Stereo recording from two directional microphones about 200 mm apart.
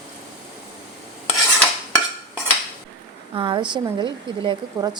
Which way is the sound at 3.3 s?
25° right (ahead or behind).